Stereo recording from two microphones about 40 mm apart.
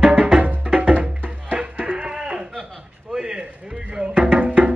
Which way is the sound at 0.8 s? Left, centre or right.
Right.